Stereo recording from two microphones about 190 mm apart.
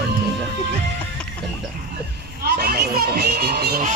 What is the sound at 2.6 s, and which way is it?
Speech, 55° right (ahead or behind).